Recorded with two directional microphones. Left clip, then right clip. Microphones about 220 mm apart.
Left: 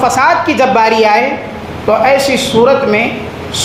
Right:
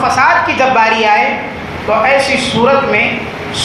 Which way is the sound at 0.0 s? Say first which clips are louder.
Even; 55° left (ahead or behind).